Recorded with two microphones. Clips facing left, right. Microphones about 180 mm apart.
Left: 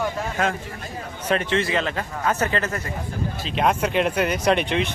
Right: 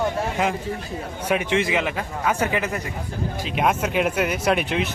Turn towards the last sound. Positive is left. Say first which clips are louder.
# left 1 dB
turn(degrees=-5)  # may be behind; listen again after turning